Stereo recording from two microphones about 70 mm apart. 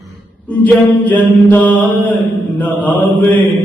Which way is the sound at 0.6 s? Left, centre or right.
Left.